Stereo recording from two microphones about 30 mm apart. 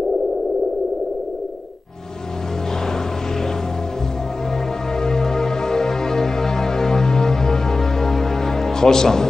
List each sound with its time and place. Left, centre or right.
5.0 s music: centre